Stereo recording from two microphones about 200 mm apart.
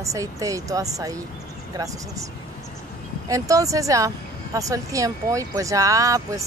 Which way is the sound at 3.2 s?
15° right (ahead or behind).